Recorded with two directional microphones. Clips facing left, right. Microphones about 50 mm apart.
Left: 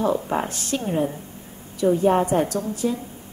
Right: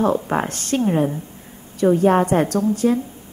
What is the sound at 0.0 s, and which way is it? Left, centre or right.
A woman's voice, right.